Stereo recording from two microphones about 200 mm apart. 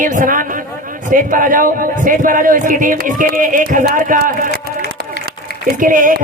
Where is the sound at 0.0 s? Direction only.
40° right (ahead or behind).